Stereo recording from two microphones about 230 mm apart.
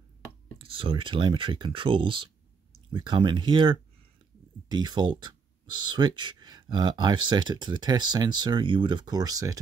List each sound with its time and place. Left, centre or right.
0.6 s speech: right